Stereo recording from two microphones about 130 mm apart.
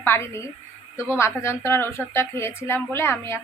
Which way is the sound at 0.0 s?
20° left (ahead or behind).